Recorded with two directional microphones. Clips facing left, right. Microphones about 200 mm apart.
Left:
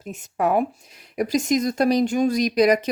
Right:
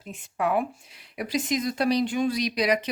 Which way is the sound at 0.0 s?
45° left (ahead or behind).